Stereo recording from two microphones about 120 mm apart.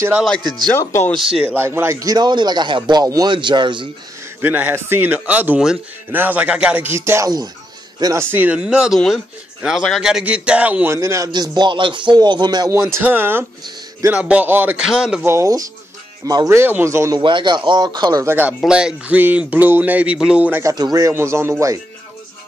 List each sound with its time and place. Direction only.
0.2 s speech: centre (ahead or behind)
0.7 s speech: 20° left (ahead or behind)
1.4 s speech: 15° right (ahead or behind); by 3.9 s 40° right (ahead or behind)
4.4 s a man's voice: 15° right (ahead or behind)
11.3 s speech: 35° right (ahead or behind)
13.0 s a man's voice: 15° right (ahead or behind)
15.2 s speech: 25° right (ahead or behind)
17.2 s speech: 40° right (ahead or behind)
18.2 s speech: 20° right (ahead or behind)
18.6 s a man's voice: 5° right (ahead or behind)
20.6 s speech: 30° right (ahead or behind)